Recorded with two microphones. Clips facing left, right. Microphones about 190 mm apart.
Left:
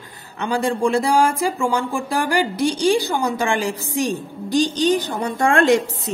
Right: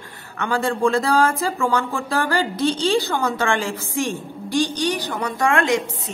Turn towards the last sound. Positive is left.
turn(degrees=35)  # may be behind; listen again after turning